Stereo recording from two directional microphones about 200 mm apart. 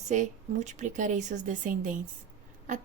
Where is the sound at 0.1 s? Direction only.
35° right (ahead or behind).